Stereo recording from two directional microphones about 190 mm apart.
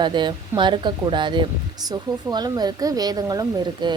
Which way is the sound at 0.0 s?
25° right (ahead or behind).